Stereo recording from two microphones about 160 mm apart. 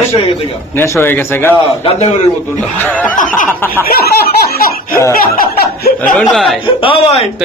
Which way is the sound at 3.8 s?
75° left (ahead or behind).